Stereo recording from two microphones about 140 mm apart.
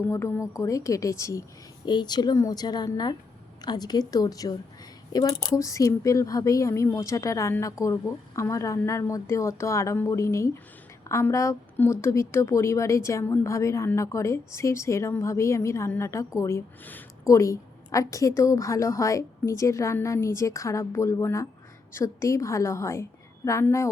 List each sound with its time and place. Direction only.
0.0 s a woman's voice: 20° left (ahead or behind)